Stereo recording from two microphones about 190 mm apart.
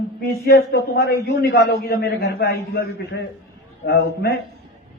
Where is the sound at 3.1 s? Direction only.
70° left (ahead or behind).